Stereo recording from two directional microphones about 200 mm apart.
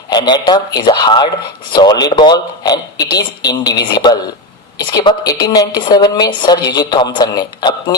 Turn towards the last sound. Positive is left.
turn(degrees=20)  # may be behind; listen again after turning